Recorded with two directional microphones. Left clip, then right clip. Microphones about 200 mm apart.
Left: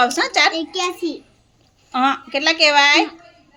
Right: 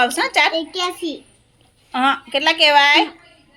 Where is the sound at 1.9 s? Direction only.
5° left (ahead or behind).